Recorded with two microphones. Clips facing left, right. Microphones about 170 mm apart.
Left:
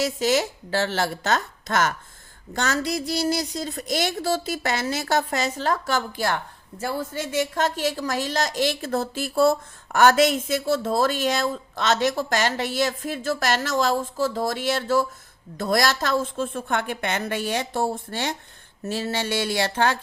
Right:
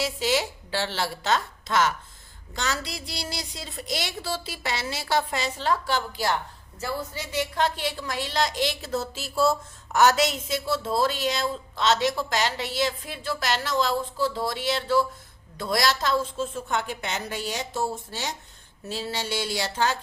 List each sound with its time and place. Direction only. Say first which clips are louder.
0.0 s a woman's voice: left 4 dB; 45° left (ahead or behind); by 20.0 s 60° left (ahead or behind)